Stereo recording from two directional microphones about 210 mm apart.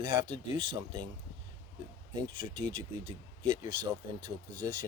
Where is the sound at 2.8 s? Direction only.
20° right (ahead or behind).